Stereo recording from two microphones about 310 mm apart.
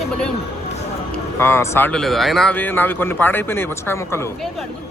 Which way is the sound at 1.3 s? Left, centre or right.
Centre.